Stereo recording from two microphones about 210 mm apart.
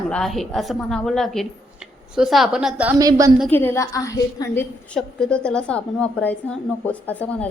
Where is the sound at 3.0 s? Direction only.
15° right (ahead or behind).